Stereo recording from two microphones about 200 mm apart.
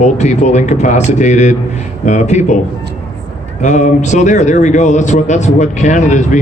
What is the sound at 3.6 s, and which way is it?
A man's voice, 35° left (ahead or behind).